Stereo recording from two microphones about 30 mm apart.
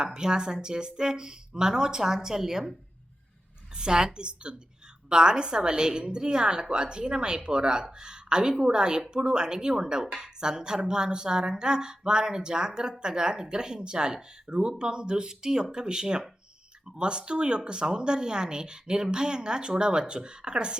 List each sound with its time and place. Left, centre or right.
0.0 s a woman's voice: right
3.8 s a woman's voice: right